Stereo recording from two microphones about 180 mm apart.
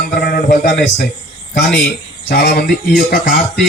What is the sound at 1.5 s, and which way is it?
A man's voice, 60° left (ahead or behind).